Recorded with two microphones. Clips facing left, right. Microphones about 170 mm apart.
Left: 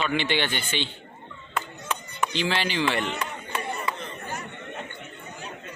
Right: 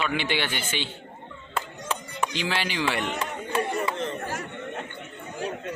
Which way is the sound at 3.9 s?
80° right.